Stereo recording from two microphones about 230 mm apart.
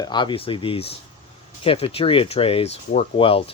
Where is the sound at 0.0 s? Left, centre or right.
Centre.